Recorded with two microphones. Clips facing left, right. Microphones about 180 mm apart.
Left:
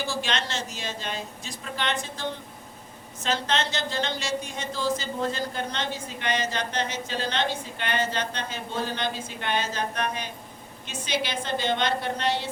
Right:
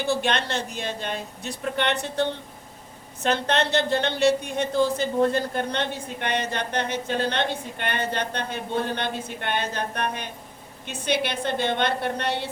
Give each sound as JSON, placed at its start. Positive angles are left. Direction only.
{"t": 0.1, "sound": "a woman's voice", "side_deg": -60}
{"t": 3.2, "sound": "a woman's voice", "side_deg": -60}